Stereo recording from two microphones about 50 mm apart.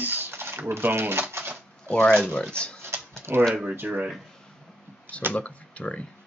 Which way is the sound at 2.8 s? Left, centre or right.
Right.